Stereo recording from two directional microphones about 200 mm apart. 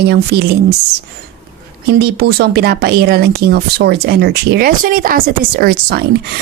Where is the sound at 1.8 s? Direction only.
55° right (ahead or behind).